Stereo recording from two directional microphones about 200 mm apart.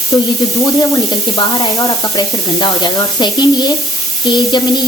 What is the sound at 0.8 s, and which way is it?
Speech, 20° left (ahead or behind).